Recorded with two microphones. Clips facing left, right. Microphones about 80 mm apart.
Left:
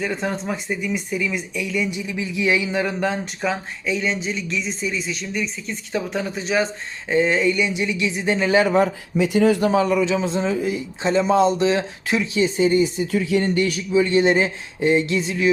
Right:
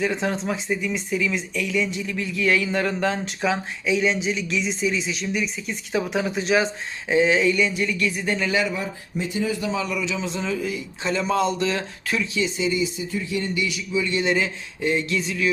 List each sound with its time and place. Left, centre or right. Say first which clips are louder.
0.0 s speech: right 1 dB; centre
7.8 s speech: left 1 dB; centre
8.4 s speech: left 7 dB; left
8.7 s speech: left 10 dB; left
9.9 s speech: left 7 dB; left
12.5 s speech: left 6 dB; left
13.1 s speech: left 7 dB; left
13.5 s speech: left 6 dB; left